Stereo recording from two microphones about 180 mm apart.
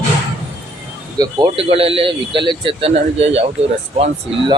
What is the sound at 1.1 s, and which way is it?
A man's voice, 25° right (ahead or behind).